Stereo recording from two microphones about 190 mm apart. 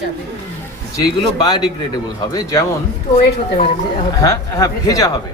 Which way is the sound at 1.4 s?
20° left (ahead or behind).